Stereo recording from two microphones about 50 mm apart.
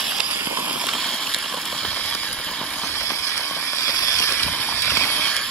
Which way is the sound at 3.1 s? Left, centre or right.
Left.